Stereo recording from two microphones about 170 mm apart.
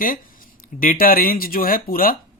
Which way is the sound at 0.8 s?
55° left (ahead or behind).